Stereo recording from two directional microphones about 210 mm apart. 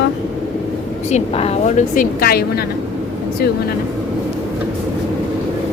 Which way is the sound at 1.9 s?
45° left (ahead or behind).